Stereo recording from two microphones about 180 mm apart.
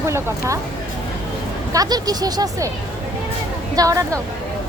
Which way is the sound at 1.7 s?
20° right (ahead or behind).